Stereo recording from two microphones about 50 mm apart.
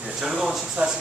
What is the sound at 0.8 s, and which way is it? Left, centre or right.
Speech, right.